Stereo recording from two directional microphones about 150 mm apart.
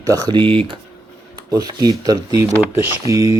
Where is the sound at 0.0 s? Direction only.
25° right (ahead or behind).